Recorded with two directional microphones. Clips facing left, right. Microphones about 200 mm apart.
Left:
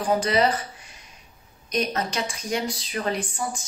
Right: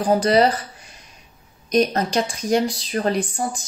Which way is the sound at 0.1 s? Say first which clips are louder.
Right 5 dB; 35° right (ahead or behind).